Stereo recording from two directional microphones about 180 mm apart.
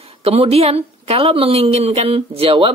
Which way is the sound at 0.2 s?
35° right (ahead or behind).